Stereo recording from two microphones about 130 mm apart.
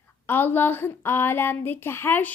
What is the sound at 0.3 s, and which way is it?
A woman's voice, 15° left (ahead or behind).